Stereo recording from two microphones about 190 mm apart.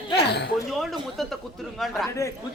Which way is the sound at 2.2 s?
15° left (ahead or behind).